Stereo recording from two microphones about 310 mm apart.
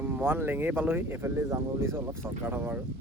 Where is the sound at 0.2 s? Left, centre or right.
Centre.